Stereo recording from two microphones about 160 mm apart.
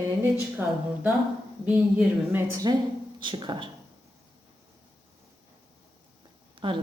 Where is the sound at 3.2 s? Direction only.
30° right (ahead or behind).